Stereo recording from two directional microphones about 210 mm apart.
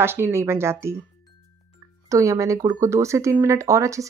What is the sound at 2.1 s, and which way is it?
Speech, 15° right (ahead or behind).